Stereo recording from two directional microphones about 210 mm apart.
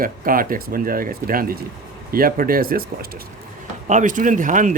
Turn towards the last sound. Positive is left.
turn(degrees=-40)  # may be behind; listen again after turning